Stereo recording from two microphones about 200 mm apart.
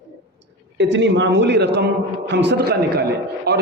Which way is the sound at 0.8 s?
65° right (ahead or behind).